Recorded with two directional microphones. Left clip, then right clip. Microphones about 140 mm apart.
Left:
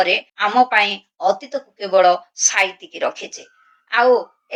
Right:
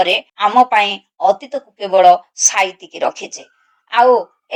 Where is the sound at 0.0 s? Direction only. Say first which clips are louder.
Right 3 dB; 35° right (ahead or behind).